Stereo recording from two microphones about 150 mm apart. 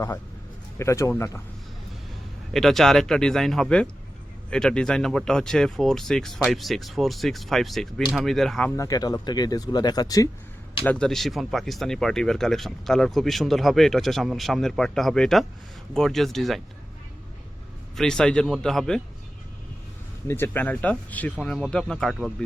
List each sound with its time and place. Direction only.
0.8 s speech: 20° left (ahead or behind)
2.5 s speech: centre (ahead or behind)
8.7 s speech: 20° left (ahead or behind)
10.8 s speech: 5° left (ahead or behind)
17.9 s speech: 5° left (ahead or behind)
20.2 s speech: 15° left (ahead or behind)